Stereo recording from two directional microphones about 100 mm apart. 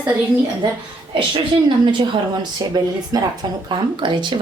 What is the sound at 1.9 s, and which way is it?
A woman's voice, 50° right (ahead or behind).